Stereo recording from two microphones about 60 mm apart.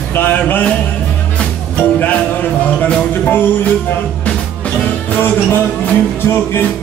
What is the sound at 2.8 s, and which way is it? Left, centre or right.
Music, left.